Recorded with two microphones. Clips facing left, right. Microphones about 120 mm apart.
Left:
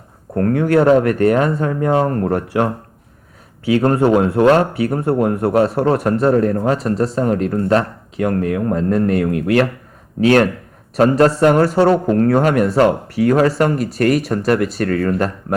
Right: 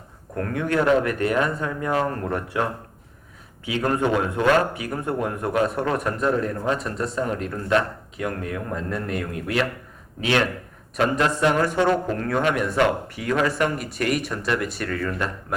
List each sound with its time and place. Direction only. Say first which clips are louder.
0.3 s a man's voice: left 9 dB; 35° left (ahead or behind)
9.3 s speech: left 6 dB; 60° left (ahead or behind)
10.2 s a man's voice: left 10 dB; 45° left (ahead or behind)